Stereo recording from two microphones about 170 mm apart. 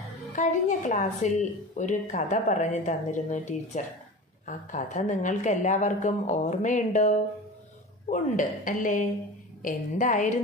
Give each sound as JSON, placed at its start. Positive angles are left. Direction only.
{"t": 0.4, "sound": "a woman's voice", "side_deg": 45}